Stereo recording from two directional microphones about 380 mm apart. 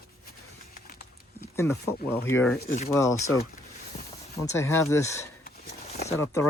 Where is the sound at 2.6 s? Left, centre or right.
Centre.